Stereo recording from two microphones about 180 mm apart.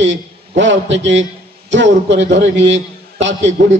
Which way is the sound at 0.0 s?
90° right.